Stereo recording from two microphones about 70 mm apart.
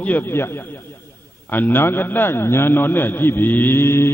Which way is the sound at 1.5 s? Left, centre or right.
Left.